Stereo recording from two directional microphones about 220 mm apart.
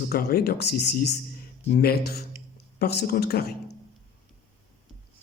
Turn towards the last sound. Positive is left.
turn(degrees=45)  # may be behind; listen again after turning